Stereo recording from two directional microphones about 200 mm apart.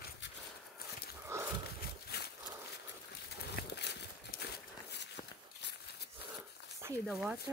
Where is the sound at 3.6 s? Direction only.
55° left (ahead or behind).